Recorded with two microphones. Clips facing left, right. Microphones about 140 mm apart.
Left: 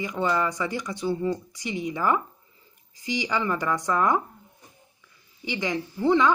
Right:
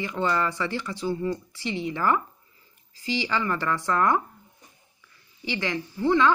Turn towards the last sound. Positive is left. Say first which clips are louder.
# even
turn(degrees=15)  # may be behind; listen again after turning